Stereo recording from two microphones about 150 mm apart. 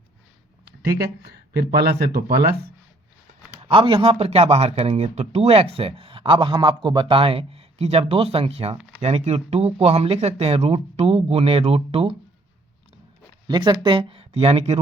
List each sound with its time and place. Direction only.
0.8 s speech: 90° right
3.6 s speech: 35° right (ahead or behind)
13.5 s speech: 30° right (ahead or behind)